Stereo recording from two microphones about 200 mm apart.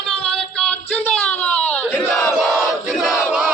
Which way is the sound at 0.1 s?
5° left (ahead or behind).